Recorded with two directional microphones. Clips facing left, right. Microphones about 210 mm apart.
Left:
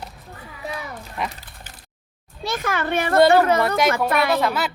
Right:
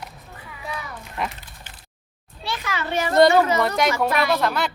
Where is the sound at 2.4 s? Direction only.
45° left (ahead or behind).